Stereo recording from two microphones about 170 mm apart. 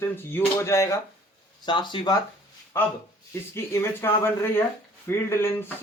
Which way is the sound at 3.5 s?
15° left (ahead or behind).